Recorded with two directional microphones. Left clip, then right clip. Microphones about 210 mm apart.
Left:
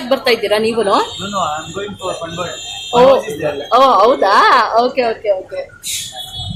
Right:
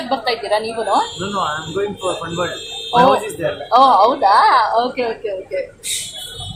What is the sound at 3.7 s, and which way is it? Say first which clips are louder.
A woman's voice: left 2 dB; 30° left (ahead or behind).